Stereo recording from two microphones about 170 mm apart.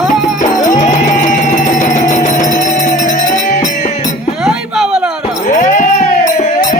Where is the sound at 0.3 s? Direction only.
45° left (ahead or behind).